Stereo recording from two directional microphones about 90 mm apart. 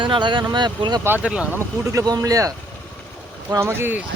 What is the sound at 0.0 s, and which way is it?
Speech, 65° right (ahead or behind).